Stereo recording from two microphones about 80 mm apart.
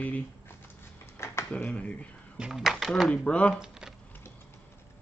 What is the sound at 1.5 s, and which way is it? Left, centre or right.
Speech, centre.